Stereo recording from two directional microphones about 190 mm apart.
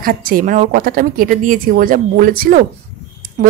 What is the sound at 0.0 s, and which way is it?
A woman's voice, 50° right (ahead or behind).